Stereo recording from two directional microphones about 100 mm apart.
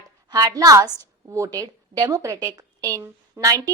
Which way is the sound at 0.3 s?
45° right (ahead or behind).